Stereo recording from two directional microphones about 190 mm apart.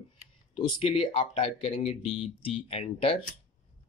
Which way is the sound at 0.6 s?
25° left (ahead or behind).